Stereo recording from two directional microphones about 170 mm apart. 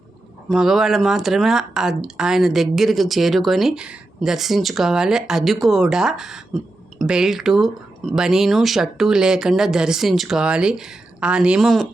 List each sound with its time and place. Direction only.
0.5 s speech: centre (ahead or behind)